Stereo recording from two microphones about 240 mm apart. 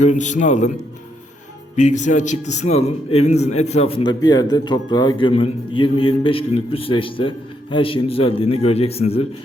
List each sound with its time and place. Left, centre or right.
0.0 s a man's voice: left
1.7 s a man's voice: left